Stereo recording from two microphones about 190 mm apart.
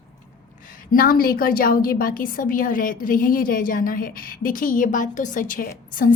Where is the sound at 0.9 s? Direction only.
50° left (ahead or behind).